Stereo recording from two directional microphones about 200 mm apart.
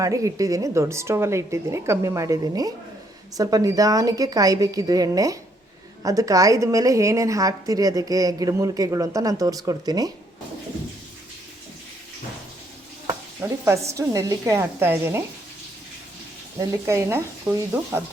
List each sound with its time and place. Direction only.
0.0 s a woman's voice: 15° right (ahead or behind)
13.4 s a woman's voice: 15° right (ahead or behind)
16.6 s a woman's voice: 15° right (ahead or behind)